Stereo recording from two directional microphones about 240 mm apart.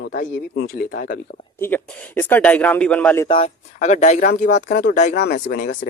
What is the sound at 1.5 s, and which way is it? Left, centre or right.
Speech, centre.